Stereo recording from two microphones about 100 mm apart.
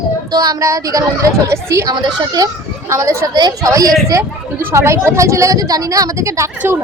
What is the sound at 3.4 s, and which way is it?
Speech, 40° right (ahead or behind).